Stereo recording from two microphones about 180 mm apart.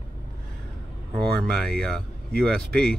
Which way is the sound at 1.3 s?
5° left (ahead or behind).